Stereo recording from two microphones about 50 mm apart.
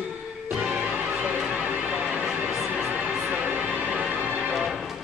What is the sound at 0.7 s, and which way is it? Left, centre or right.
Music, right.